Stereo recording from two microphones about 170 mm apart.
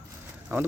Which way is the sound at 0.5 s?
15° right (ahead or behind).